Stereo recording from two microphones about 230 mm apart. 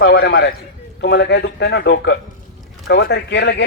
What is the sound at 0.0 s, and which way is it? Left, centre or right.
A man's voice, left.